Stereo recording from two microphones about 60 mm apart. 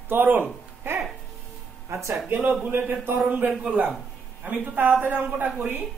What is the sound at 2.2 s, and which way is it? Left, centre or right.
Speech, right.